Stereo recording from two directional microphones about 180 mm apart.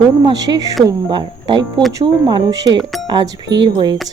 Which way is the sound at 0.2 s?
20° right (ahead or behind).